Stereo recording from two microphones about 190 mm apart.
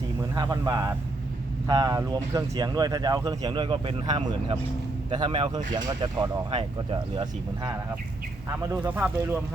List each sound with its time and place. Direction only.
0.2 s speech: 20° right (ahead or behind)
8.5 s speech: 10° right (ahead or behind)